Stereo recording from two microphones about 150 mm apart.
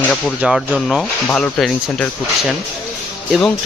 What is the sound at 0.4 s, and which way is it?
Speech, 5° right (ahead or behind).